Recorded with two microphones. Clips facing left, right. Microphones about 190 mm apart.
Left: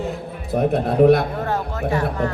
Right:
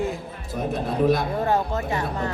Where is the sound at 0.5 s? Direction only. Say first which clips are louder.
Left 8 dB; 65° left (ahead or behind).